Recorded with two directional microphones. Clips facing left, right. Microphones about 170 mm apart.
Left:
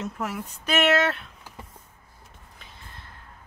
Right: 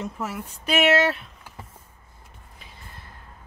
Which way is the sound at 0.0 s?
5° right (ahead or behind).